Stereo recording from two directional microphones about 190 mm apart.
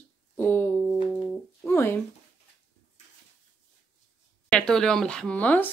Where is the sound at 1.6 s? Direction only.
10° left (ahead or behind).